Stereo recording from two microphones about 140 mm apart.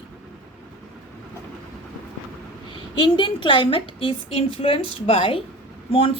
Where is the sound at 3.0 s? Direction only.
35° left (ahead or behind).